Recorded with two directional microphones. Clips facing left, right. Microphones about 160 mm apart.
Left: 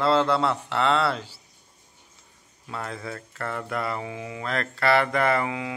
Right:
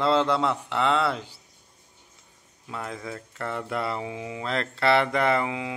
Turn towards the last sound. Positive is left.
turn(degrees=-20)  # may be behind; listen again after turning